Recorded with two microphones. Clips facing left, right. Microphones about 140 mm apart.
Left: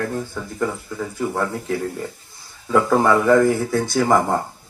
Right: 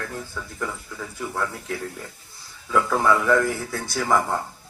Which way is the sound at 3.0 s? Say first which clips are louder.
Left 5 dB; 25° left (ahead or behind).